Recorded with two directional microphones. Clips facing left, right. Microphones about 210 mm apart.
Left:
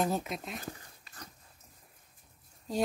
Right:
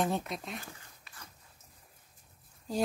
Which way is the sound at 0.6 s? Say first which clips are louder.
Left 7 dB; 40° left (ahead or behind).